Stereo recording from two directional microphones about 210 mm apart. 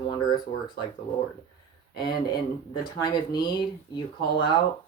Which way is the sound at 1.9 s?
20° left (ahead or behind).